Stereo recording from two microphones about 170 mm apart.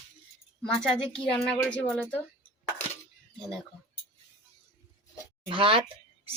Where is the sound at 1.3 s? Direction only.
5° left (ahead or behind).